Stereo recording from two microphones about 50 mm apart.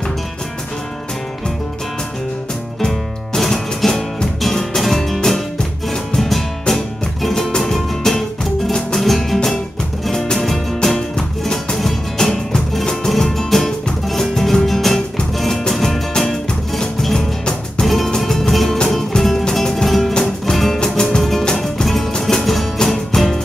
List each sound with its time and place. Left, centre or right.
2.8 s music: centre
17.8 s music: centre
20.8 s music: centre
21.2 s music: centre